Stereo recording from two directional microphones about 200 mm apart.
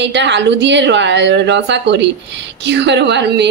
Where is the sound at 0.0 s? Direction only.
60° right (ahead or behind).